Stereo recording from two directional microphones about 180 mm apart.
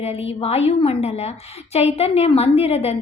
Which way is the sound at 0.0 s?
35° left (ahead or behind).